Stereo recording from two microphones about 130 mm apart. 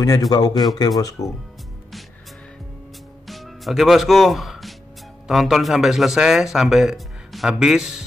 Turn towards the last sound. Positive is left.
turn(degrees=-5)  # may be behind; listen again after turning